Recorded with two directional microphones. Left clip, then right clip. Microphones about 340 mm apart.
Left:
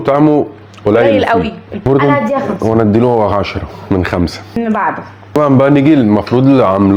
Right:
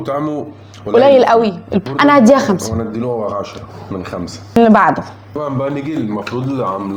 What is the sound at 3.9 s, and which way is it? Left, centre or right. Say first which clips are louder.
Speech: left 10 dB; left.